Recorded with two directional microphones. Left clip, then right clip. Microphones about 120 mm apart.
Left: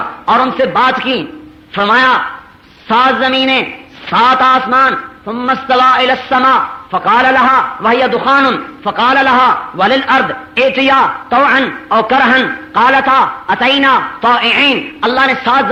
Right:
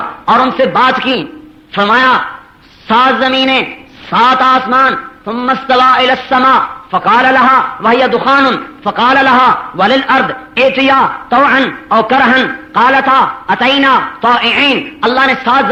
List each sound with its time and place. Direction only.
0.0 s a man's voice: 35° right (ahead or behind)
1.0 s a man's voice: 35° right (ahead or behind)
4.1 s a man's voice: 30° right (ahead or behind)
5.2 s a man's voice: 40° right (ahead or behind)
6.1 s a man's voice: 45° right (ahead or behind)
11.9 s a man's voice: 30° right (ahead or behind)